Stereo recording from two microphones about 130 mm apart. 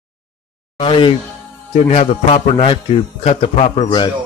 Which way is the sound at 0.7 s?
40° left (ahead or behind).